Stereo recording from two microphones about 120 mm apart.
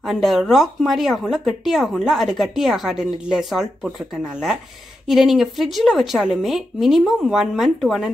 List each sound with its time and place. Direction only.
0.0 s speech: centre (ahead or behind)